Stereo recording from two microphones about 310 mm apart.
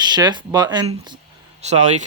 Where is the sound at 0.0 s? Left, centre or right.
Centre.